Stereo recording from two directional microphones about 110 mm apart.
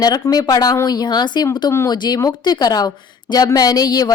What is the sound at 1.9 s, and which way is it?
A woman's voice, 40° left (ahead or behind).